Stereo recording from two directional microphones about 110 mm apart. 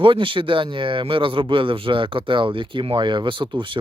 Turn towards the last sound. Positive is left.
turn(degrees=-50)  # may be behind; listen again after turning